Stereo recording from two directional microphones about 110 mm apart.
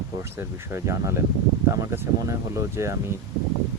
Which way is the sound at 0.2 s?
25° right (ahead or behind).